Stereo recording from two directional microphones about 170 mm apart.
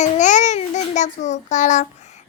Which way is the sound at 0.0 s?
45° left (ahead or behind).